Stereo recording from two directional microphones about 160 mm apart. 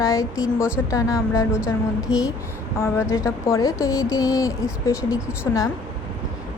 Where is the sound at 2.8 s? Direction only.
15° left (ahead or behind).